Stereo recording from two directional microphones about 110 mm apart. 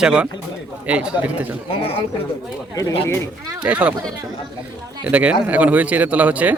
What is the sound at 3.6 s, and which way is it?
Speech, 10° right (ahead or behind).